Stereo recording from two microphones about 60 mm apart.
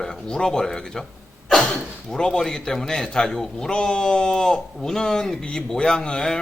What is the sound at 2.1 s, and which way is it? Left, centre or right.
A man's voice, centre.